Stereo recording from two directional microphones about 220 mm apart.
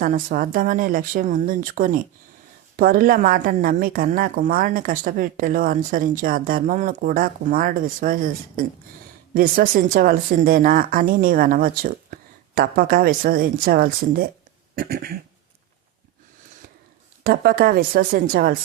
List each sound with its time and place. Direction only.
0.0 s a woman's voice: 40° right (ahead or behind)
14.8 s a sound: 45° right (ahead or behind)
17.2 s a woman's voice: 45° right (ahead or behind)